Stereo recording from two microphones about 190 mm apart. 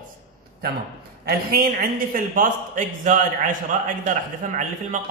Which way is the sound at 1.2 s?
50° right (ahead or behind).